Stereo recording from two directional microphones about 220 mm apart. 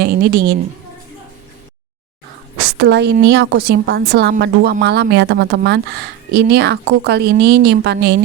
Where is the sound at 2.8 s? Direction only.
50° right (ahead or behind).